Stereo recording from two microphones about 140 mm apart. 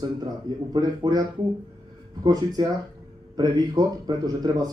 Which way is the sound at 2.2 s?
25° right (ahead or behind).